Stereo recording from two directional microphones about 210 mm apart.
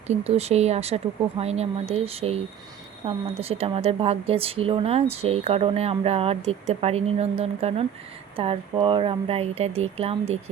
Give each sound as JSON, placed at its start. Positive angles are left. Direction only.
{"t": 0.1, "sound": "speech", "side_deg": -30}